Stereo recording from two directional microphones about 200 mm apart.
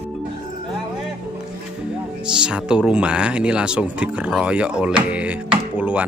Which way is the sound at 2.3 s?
5° right (ahead or behind).